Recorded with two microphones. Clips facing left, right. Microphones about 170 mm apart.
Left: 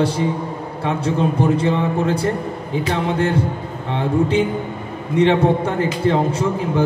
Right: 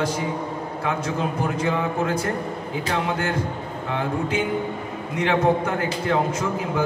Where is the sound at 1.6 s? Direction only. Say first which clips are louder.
Left 4 dB; 30° left (ahead or behind).